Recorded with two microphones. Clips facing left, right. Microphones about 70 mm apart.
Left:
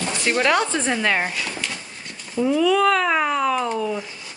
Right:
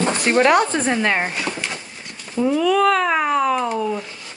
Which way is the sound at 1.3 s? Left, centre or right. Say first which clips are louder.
Right 3 dB; right.